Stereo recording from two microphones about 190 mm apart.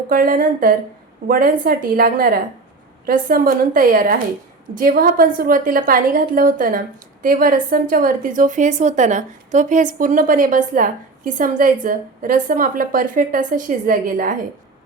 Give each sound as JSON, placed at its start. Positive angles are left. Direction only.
{"t": 0.1, "sound": "a woman's voice", "side_deg": -50}